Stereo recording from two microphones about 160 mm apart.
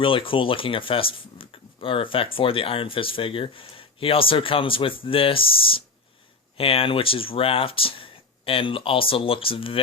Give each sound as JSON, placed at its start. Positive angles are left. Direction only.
{"t": 0.0, "sound": "speech", "side_deg": 35}